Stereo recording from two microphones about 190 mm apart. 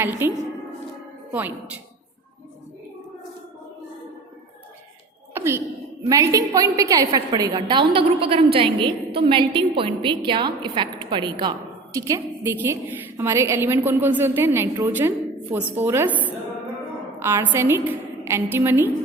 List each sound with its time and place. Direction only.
0.2 s a woman's voice: 10° right (ahead or behind)
5.3 s a sound: 15° right (ahead or behind)
6.1 s a woman's voice: 20° right (ahead or behind)